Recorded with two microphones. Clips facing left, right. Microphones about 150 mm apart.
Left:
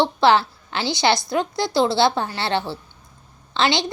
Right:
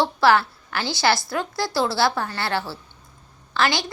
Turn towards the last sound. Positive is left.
turn(degrees=20)  # may be behind; listen again after turning